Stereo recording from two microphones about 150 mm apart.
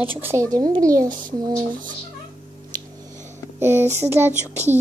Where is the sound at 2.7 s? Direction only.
25° right (ahead or behind).